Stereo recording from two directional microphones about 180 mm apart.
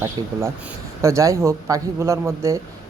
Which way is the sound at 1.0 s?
15° right (ahead or behind).